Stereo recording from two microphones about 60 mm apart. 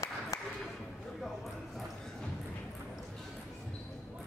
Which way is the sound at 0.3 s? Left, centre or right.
Left.